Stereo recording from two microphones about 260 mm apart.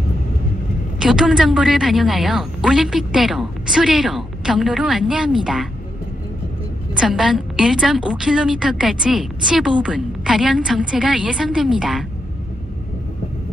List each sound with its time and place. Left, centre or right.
0.9 s a woman's voice: centre
7.0 s a woman's voice: centre